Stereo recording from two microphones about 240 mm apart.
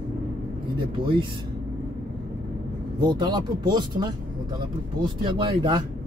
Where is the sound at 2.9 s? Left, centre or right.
Centre.